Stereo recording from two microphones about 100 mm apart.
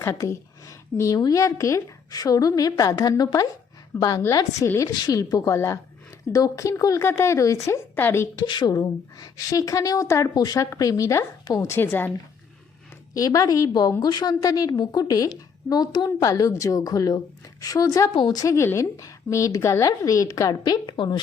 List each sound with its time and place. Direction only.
0.0 s speech: 25° left (ahead or behind)
3.9 s a woman's voice: 25° left (ahead or behind)
5.0 s a woman's voice: 40° left (ahead or behind); by 8.3 s 25° left (ahead or behind)
8.4 s a woman's voice: 45° left (ahead or behind); by 12.1 s 20° left (ahead or behind)
13.1 s speech: 35° left (ahead or behind)
18.1 s speech: 45° left (ahead or behind)